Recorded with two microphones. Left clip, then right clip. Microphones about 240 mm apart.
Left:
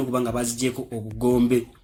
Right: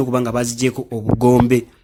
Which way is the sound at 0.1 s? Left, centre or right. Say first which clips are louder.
Right 6 dB; right.